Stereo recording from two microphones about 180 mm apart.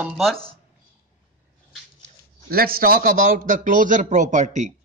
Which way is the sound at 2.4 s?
55° right (ahead or behind).